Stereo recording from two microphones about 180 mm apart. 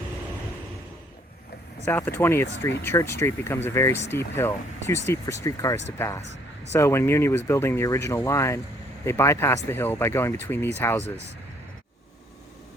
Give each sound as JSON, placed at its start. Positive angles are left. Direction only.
{"t": 1.8, "sound": "speech", "side_deg": 10}